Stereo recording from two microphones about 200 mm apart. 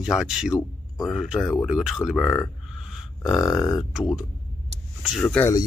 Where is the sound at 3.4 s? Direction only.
15° left (ahead or behind).